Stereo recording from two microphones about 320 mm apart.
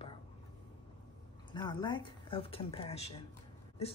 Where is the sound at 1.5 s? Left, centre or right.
Centre.